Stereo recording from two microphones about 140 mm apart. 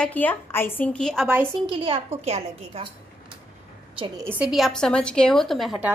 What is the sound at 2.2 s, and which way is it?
Speech, 50° right (ahead or behind).